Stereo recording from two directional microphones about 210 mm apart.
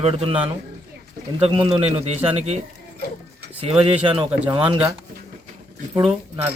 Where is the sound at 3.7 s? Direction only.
25° right (ahead or behind).